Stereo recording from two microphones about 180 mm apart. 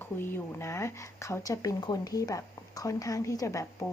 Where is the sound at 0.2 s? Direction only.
15° left (ahead or behind).